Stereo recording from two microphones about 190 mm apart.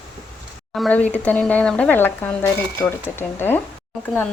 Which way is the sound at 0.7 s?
5° left (ahead or behind).